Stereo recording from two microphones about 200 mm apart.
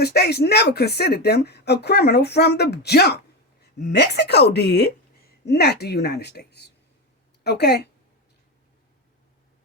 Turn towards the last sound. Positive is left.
turn(degrees=55)  # may be behind; listen again after turning